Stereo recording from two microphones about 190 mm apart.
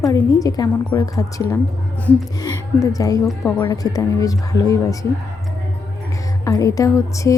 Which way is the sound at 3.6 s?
20° left (ahead or behind).